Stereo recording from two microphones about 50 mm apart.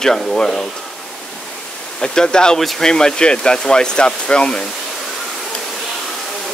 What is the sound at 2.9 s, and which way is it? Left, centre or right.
Speech, centre.